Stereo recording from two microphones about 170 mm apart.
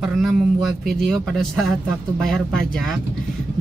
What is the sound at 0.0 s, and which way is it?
A man's voice, centre (ahead or behind).